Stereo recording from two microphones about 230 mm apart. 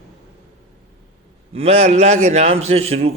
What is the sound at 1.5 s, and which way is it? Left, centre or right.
A man's voice, right.